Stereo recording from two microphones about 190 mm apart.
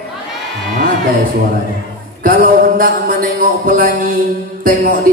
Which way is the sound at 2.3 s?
50° right (ahead or behind).